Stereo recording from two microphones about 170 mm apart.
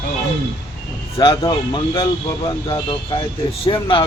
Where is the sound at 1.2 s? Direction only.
25° left (ahead or behind).